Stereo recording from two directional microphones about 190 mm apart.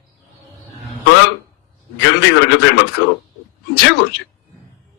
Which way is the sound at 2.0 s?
75° left (ahead or behind).